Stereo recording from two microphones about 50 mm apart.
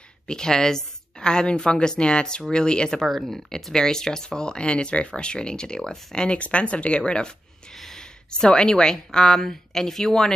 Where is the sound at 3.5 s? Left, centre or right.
Centre.